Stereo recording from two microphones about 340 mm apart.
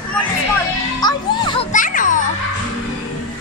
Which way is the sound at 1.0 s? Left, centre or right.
Centre.